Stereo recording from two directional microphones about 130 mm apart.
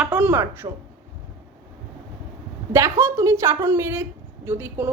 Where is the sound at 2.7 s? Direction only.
20° right (ahead or behind).